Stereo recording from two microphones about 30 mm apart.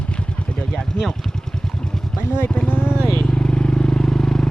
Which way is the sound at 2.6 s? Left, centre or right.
Left.